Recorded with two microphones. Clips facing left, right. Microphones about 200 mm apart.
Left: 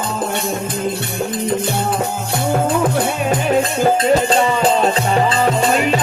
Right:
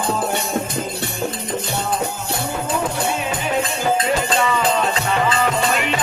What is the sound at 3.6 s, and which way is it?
Music, 40° left (ahead or behind).